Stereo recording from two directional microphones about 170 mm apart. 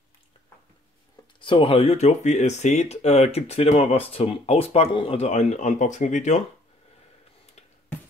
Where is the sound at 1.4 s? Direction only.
30° left (ahead or behind).